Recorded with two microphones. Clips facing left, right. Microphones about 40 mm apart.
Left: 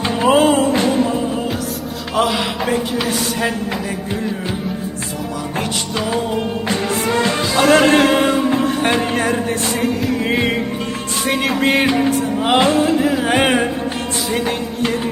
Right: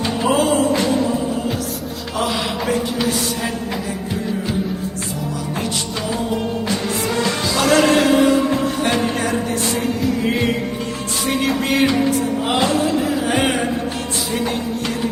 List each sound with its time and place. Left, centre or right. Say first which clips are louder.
0.0 s music: left 4 dB; left
2.1 s music: left 4 dB; centre
6.0 s music: left 5 dB; centre
6.7 s music: left 3 dB; left
9.8 s music: left 1 dB; centre
11.6 s music: left 3 dB; left
14.3 s music: left 3 dB; centre